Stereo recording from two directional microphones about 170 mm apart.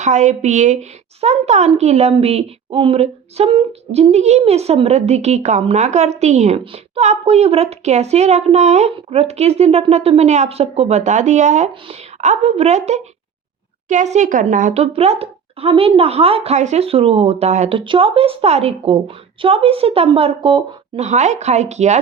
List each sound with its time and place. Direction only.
0.0 s a woman's voice: 45° right (ahead or behind)